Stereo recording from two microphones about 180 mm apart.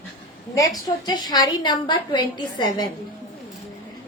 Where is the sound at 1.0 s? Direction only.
20° left (ahead or behind).